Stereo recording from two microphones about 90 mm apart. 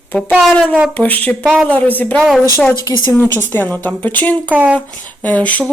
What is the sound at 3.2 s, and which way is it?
Speech, 25° left (ahead or behind).